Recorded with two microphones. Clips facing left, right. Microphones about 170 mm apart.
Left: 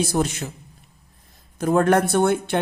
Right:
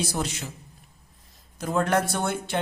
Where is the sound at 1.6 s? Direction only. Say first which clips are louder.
Left 6 dB; 55° left (ahead or behind).